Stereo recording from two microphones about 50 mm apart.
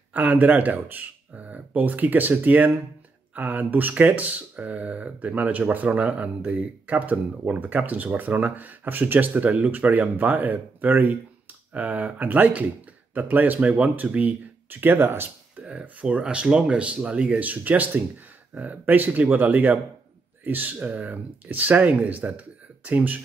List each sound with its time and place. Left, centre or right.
0.1 s speech: right
15.8 s speech: right